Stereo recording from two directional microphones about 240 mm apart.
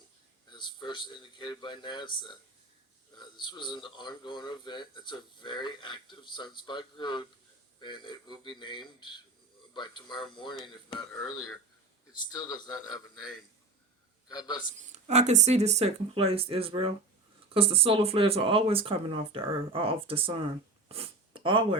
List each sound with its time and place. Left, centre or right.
0.5 s speech: centre
14.3 s speech: centre
14.8 s speech: right
20.8 s sniff: right